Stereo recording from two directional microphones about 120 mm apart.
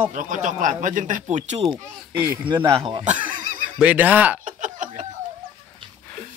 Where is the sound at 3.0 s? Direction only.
90° right.